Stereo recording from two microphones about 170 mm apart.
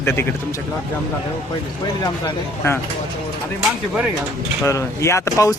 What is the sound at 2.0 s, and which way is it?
Speech, 15° left (ahead or behind).